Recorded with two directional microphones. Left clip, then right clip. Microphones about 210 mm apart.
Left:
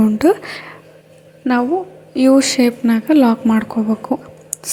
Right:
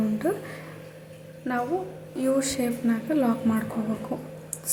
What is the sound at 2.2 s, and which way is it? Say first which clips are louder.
A woman's voice: left 13 dB; 35° left (ahead or behind).